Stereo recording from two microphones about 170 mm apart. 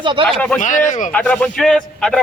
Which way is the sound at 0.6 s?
45° left (ahead or behind).